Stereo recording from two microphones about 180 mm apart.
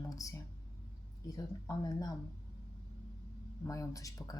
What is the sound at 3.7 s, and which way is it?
Speech, 20° left (ahead or behind).